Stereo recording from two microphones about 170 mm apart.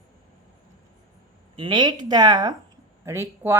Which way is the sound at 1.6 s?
25° right (ahead or behind).